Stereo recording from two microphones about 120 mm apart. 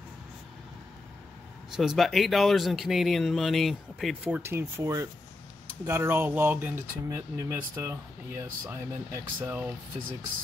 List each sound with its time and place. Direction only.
1.8 s speech: centre (ahead or behind)
4.4 s speech: 20° right (ahead or behind)